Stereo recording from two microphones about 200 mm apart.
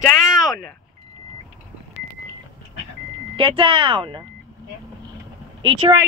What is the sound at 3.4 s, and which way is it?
Speech, 25° right (ahead or behind).